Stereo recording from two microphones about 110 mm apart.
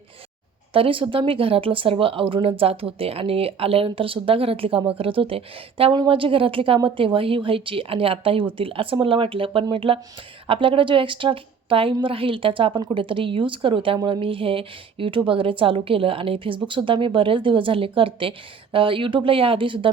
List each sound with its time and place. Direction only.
0.7 s a woman's voice: 55° right (ahead or behind)